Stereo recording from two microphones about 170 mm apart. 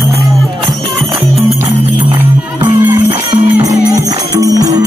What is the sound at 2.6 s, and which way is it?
Music, 10° right (ahead or behind).